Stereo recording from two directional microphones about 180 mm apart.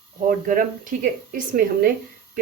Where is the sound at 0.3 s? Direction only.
50° right (ahead or behind).